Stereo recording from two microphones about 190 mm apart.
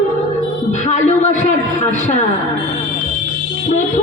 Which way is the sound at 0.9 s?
35° left (ahead or behind).